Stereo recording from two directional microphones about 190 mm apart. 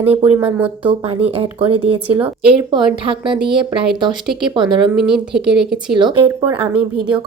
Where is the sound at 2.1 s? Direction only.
10° right (ahead or behind).